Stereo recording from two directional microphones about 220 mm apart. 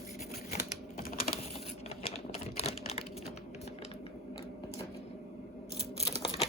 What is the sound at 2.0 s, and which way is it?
Typewriter, 25° left (ahead or behind).